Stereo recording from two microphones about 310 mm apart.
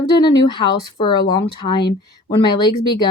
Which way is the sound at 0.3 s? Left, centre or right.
Centre.